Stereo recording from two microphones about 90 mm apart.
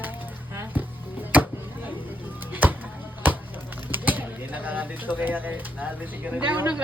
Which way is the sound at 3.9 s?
20° right (ahead or behind).